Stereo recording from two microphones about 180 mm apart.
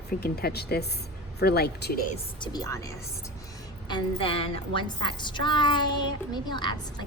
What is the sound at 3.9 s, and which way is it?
A woman's voice, 30° left (ahead or behind).